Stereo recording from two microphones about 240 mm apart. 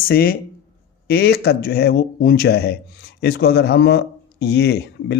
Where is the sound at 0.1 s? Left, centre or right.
Left.